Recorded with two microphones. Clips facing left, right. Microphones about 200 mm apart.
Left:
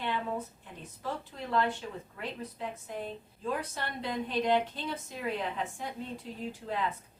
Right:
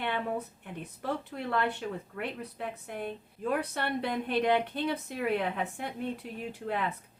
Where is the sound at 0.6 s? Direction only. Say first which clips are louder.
Right 2 dB; 60° right (ahead or behind).